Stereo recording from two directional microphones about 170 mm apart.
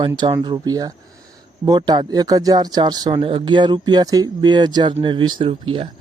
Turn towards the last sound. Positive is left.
turn(degrees=-35)  # may be behind; listen again after turning